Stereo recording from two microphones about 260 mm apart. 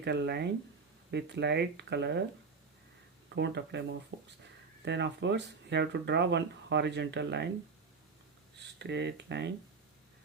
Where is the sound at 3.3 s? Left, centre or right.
Right.